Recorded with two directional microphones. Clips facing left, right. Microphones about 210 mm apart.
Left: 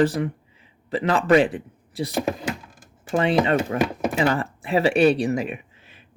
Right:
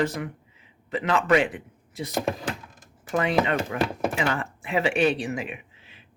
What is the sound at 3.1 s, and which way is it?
Speech, 30° left (ahead or behind).